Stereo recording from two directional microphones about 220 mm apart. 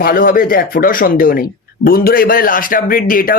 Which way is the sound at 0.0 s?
40° left (ahead or behind).